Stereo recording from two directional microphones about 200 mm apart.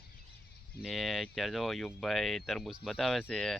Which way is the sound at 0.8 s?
Centre (ahead or behind).